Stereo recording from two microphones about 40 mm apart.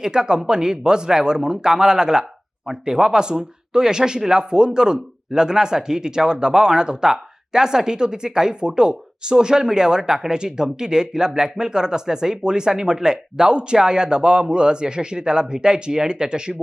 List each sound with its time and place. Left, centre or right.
0.0 s speech: centre